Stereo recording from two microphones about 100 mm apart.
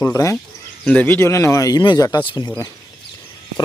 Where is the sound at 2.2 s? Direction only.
55° left (ahead or behind).